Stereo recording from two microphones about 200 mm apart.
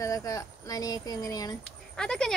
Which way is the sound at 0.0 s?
15° left (ahead or behind).